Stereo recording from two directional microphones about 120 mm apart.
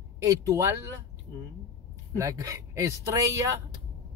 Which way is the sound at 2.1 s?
30° right (ahead or behind).